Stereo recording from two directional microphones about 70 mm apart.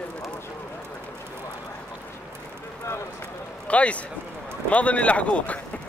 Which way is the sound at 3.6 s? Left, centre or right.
Centre.